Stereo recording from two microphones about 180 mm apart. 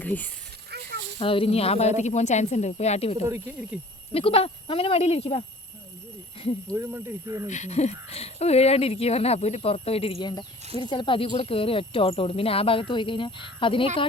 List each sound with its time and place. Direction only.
0.0 s speech: 10° left (ahead or behind)
1.2 s speech: 30° left (ahead or behind)
3.2 s speech: 10° right (ahead or behind)
4.1 s speech: 30° left (ahead or behind)
6.7 s speech: 15° right (ahead or behind)
7.4 s speech: 40° left (ahead or behind)